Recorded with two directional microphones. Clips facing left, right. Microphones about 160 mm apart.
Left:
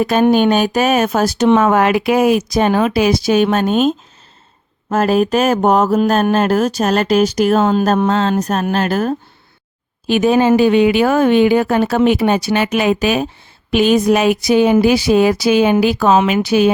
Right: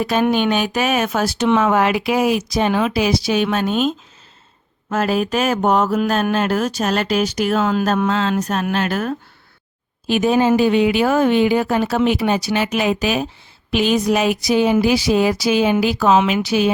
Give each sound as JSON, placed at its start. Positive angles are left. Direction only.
{"t": 0.0, "sound": "speech", "side_deg": 45}
{"t": 10.1, "sound": "speech", "side_deg": 70}